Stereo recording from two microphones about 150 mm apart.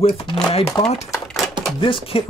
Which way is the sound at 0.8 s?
30° left (ahead or behind).